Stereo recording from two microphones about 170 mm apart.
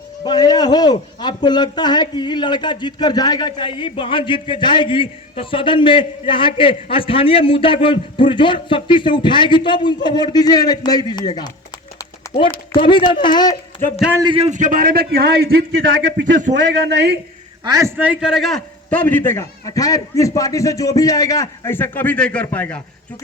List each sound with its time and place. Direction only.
0.3 s a man's voice: 25° left (ahead or behind)
12.2 s run: 20° left (ahead or behind)
12.8 s a man's voice: 30° left (ahead or behind)
14.2 s a man's voice: 30° right (ahead or behind)
14.5 s a man's voice: 50° right (ahead or behind)
16.0 s a man's voice: 90° right
17.6 s a man's voice: 20° right (ahead or behind)
18.0 s a man's voice: 5° right (ahead or behind)